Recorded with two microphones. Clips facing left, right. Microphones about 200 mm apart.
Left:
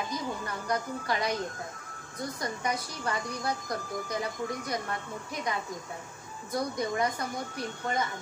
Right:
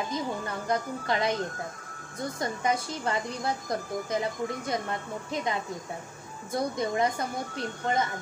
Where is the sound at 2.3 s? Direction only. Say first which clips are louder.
Right 5 dB; 25° right (ahead or behind).